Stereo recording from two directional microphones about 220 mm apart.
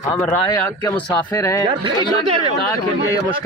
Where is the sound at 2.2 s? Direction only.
25° right (ahead or behind).